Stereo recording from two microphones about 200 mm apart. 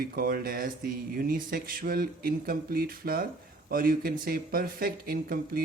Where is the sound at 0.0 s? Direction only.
50° right (ahead or behind).